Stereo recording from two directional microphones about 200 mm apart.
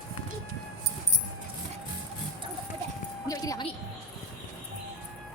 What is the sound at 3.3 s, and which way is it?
Speech, 20° left (ahead or behind).